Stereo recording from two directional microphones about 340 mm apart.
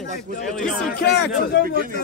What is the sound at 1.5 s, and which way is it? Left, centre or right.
Speech, left.